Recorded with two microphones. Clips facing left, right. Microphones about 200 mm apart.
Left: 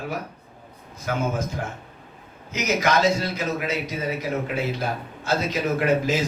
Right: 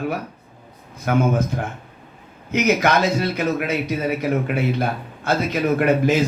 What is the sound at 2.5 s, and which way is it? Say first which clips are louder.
A man's voice: right 5 dB; 60° right (ahead or behind).